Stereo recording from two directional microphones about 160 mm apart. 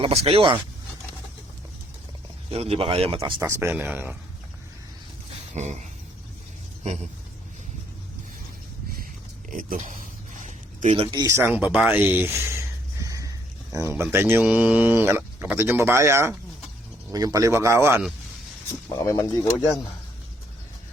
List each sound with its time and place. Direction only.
0.0 s speech: 40° right (ahead or behind)
2.5 s speech: 40° right (ahead or behind)
3.7 s speech: 10° right (ahead or behind)
5.5 s speech: 45° right (ahead or behind)
9.5 s speech: 55° right (ahead or behind)
10.4 s zipper: 50° right (ahead or behind)
10.9 s speech: 30° right (ahead or behind); by 18.0 s 15° right (ahead or behind)
18.9 s speech: 20° left (ahead or behind)